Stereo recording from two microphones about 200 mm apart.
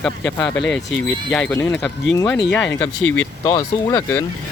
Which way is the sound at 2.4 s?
65° left (ahead or behind).